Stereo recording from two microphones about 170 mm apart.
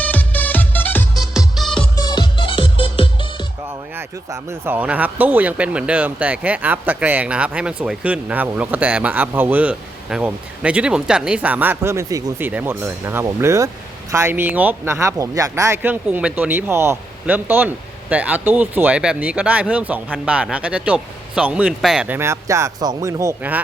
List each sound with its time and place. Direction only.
0.0 s music: 10° left (ahead or behind)
1.2 s music: centre (ahead or behind)
2.0 s music: 25° left (ahead or behind)
3.9 s speech: 15° right (ahead or behind)